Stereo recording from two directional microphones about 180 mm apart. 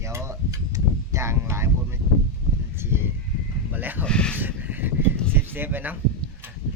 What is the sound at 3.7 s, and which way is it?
Speech, 10° right (ahead or behind).